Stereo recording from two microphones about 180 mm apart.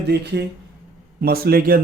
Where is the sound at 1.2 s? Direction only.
55° right (ahead or behind).